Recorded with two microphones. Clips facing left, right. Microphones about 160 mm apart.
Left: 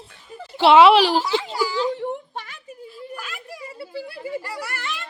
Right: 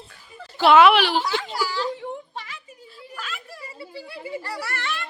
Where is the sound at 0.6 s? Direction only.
25° left (ahead or behind).